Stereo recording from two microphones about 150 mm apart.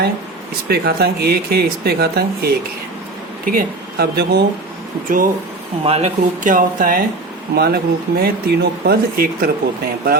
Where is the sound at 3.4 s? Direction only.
80° right.